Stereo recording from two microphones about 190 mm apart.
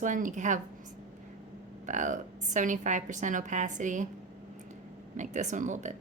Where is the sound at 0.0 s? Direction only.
40° right (ahead or behind).